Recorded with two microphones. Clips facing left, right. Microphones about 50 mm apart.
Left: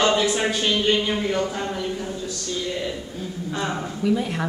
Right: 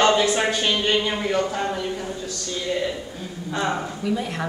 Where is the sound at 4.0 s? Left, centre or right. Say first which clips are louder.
Left 6 dB; centre.